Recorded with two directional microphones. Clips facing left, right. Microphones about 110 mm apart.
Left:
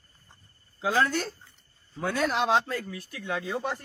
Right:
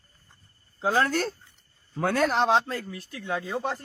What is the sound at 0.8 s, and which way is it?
Speech, 40° right (ahead or behind).